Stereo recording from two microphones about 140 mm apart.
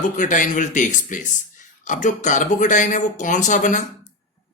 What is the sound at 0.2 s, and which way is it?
Speech, 65° left (ahead or behind).